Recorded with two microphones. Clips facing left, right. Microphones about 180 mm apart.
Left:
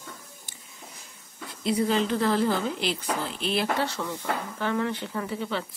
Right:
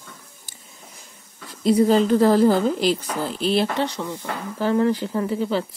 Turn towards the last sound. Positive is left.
turn(degrees=-35)  # may be behind; listen again after turning